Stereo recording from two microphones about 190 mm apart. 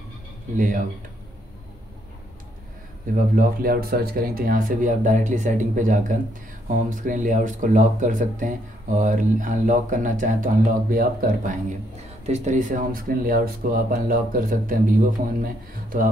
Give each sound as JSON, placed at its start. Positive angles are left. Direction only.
{"t": 0.6, "sound": "speech", "side_deg": -45}
{"t": 3.2, "sound": "speech", "side_deg": -50}